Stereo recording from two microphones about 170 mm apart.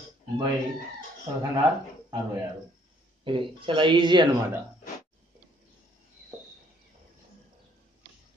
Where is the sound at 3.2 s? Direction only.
30° right (ahead or behind).